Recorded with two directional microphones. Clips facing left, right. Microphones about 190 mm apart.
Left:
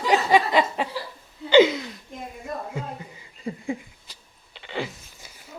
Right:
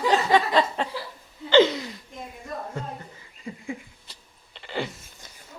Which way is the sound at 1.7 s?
Centre (ahead or behind).